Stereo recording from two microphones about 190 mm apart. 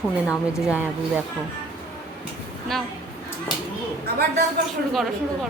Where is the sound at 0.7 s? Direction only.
10° right (ahead or behind).